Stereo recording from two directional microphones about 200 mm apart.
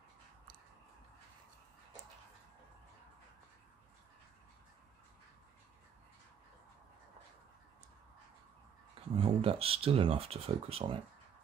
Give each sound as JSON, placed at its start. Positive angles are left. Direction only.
{"t": 9.1, "sound": "speech", "side_deg": -30}